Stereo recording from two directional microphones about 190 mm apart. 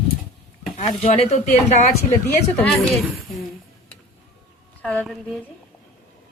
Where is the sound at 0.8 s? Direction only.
35° left (ahead or behind).